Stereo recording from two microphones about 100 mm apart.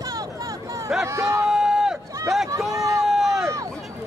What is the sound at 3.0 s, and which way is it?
Run, 5° right (ahead or behind).